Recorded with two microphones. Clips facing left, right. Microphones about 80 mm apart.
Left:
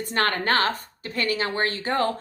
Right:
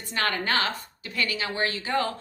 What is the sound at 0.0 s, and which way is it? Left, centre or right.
A woman's voice, left.